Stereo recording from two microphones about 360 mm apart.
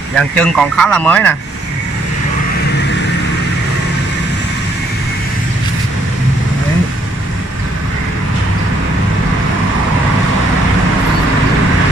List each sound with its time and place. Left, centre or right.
0.2 s speech: centre